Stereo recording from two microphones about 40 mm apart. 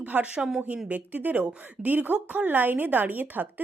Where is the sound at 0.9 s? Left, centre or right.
Right.